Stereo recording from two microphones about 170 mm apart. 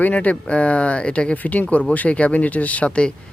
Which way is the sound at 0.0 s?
10° left (ahead or behind).